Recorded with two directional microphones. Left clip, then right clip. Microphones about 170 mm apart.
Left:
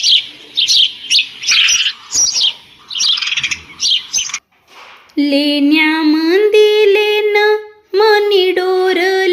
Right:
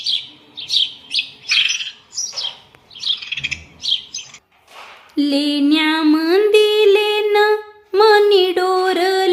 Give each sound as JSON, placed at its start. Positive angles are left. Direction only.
{"t": 0.0, "sound": "bird", "side_deg": 55}
{"t": 5.1, "sound": "music", "side_deg": 10}